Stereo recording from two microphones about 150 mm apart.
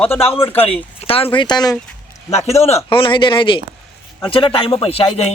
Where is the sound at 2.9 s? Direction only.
35° left (ahead or behind).